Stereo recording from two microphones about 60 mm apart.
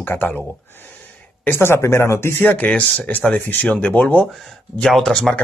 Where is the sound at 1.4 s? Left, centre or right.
Left.